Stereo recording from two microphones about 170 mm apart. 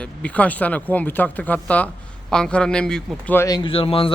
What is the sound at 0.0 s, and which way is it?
A man's voice, 5° left (ahead or behind).